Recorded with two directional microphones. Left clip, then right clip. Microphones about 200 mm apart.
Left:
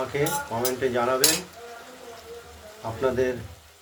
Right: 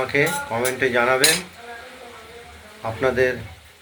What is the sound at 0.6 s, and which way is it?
Speech, 20° right (ahead or behind).